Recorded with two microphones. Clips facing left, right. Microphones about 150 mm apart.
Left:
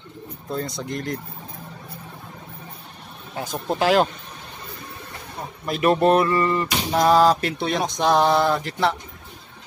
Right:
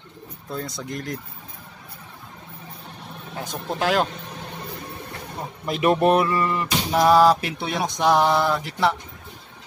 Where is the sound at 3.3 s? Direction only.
5° left (ahead or behind).